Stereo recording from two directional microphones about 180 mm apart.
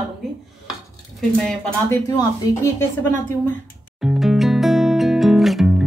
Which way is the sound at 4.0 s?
5° right (ahead or behind).